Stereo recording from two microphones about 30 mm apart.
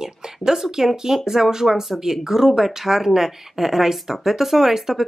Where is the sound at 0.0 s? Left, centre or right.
Centre.